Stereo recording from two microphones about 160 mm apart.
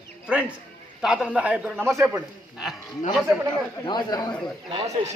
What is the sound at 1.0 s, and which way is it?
Speech, 5° right (ahead or behind).